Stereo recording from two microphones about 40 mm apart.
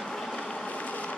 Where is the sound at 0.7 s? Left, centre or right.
Left.